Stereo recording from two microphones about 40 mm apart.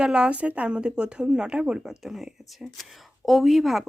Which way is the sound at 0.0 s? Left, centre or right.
Right.